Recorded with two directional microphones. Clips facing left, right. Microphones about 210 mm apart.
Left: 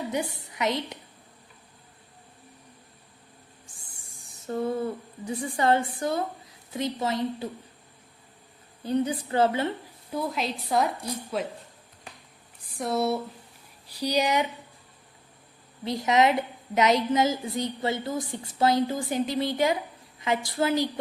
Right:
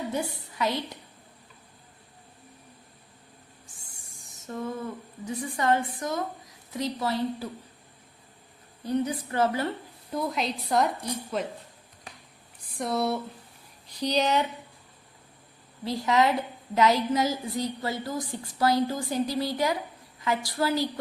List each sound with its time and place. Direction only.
0.1 s a woman's voice: 15° left (ahead or behind)
4.4 s a woman's voice: 30° left (ahead or behind)
8.8 s a woman's voice: 30° left (ahead or behind)
10.1 s a woman's voice: centre (ahead or behind)
12.7 s speech: 5° left (ahead or behind)
15.8 s a woman's voice: 20° left (ahead or behind)